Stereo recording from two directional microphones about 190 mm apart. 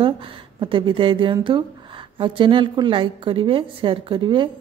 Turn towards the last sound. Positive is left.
turn(degrees=-25)  # may be behind; listen again after turning